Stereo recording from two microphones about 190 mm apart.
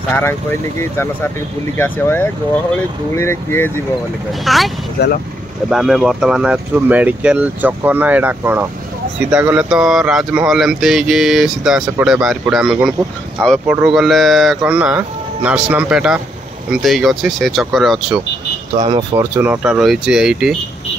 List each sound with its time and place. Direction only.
0.1 s speech: 10° left (ahead or behind)
4.5 s speech: centre (ahead or behind)
5.0 s speech: 55° left (ahead or behind)
5.7 s speech: centre (ahead or behind)
18.8 s speech: 30° right (ahead or behind)
19.1 s speech: 10° right (ahead or behind)